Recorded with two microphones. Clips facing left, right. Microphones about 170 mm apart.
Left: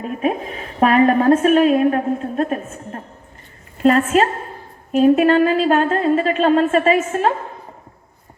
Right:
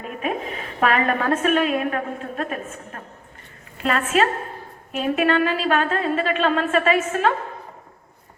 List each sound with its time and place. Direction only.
0.0 s a woman's voice: 35° left (ahead or behind)